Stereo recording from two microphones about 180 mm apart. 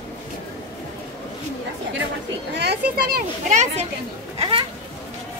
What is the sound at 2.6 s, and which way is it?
Speech, 65° right (ahead or behind).